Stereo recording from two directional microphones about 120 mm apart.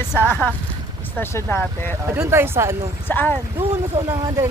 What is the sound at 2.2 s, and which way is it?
Speech, 20° right (ahead or behind).